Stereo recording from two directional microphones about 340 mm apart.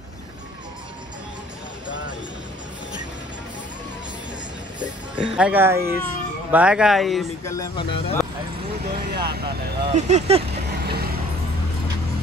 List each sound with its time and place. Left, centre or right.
4.7 s speech: centre
8.8 s speech: right
9.8 s vehicle: centre